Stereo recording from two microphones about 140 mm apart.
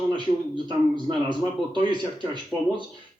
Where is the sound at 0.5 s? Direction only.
35° right (ahead or behind).